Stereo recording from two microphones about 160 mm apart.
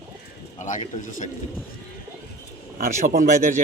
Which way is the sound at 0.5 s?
50° left (ahead or behind).